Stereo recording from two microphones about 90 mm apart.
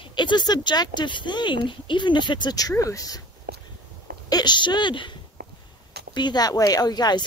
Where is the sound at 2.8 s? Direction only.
40° left (ahead or behind).